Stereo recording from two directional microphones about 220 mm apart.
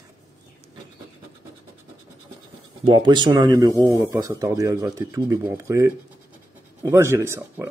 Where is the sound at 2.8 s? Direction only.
20° right (ahead or behind).